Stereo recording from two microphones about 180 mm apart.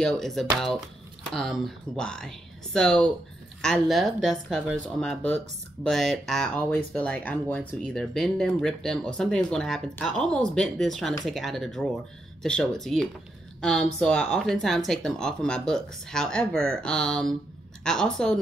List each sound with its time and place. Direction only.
0.0 s speech: centre (ahead or behind)